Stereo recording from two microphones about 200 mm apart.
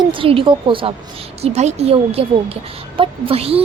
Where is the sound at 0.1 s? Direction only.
25° right (ahead or behind).